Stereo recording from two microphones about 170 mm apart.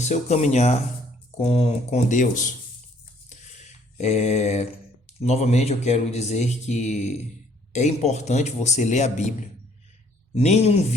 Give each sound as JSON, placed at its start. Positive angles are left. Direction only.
{"t": 0.0, "sound": "a man's voice", "side_deg": 40}
{"t": 3.2, "sound": "a sound", "side_deg": 45}
{"t": 5.2, "sound": "a man's voice", "side_deg": 40}